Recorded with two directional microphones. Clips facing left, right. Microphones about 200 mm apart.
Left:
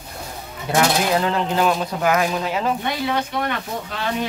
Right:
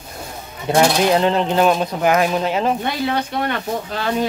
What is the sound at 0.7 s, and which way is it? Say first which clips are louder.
Speech: right 4 dB; 25° right (ahead or behind).